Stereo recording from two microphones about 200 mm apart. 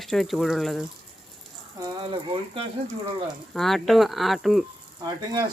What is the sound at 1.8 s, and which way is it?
Speech, 25° right (ahead or behind).